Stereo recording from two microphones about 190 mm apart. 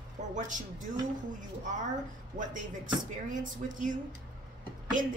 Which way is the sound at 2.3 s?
45° right (ahead or behind).